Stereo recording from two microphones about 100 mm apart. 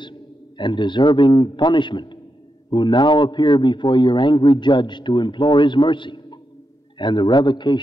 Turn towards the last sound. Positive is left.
turn(degrees=50)  # may be behind; listen again after turning